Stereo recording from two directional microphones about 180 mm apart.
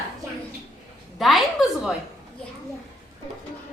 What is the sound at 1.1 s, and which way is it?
Speech, centre (ahead or behind).